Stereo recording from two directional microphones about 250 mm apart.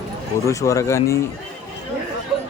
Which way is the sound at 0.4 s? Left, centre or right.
Centre.